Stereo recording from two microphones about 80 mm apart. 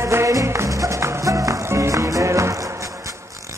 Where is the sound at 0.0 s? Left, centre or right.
Right.